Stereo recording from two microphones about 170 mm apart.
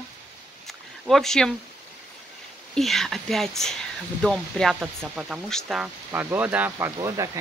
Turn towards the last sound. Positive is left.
turn(degrees=-15)  # may be behind; listen again after turning